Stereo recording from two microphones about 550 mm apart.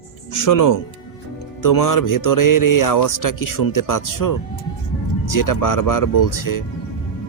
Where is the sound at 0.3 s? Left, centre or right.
Left.